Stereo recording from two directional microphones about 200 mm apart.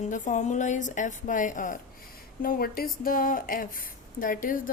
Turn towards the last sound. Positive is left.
turn(degrees=45)  # may be behind; listen again after turning